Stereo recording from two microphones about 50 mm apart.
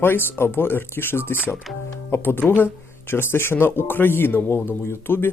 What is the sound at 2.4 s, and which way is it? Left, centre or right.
Speech, left.